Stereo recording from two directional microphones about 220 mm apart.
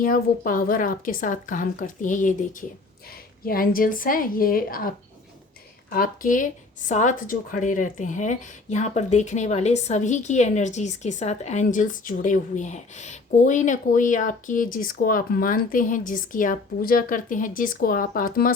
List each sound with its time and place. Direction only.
0.0 s speech: 40° left (ahead or behind)